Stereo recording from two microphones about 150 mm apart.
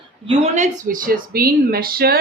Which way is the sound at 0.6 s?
60° right (ahead or behind).